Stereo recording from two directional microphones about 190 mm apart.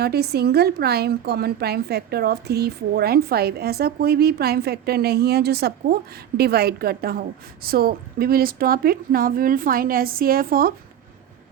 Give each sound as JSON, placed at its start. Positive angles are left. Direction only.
{"t": 0.0, "sound": "a woman's voice", "side_deg": -55}